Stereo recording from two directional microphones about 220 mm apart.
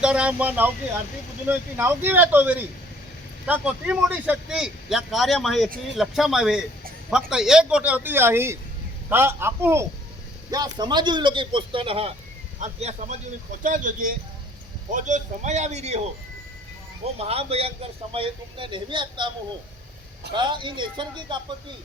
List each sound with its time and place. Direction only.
0.0 s a man's voice: 5° right (ahead or behind); by 16.0 s 30° right (ahead or behind)
17.2 s a man's voice: 25° right (ahead or behind)
20.3 s a man's voice: 20° right (ahead or behind)